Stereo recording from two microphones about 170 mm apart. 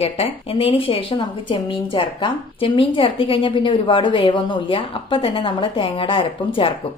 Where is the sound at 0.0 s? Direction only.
35° left (ahead or behind).